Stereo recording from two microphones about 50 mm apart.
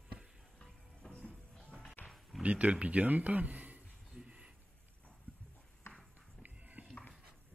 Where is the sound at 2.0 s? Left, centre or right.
Left.